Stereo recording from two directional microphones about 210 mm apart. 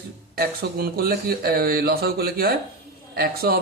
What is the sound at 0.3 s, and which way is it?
Speech, 45° right (ahead or behind).